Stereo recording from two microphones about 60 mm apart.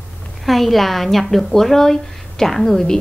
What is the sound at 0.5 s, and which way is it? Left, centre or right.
A woman's voice, centre.